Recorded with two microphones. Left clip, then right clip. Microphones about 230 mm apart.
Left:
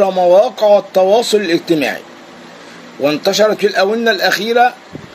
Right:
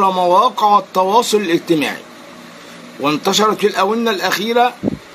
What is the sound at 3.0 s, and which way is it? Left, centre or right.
Speech, centre.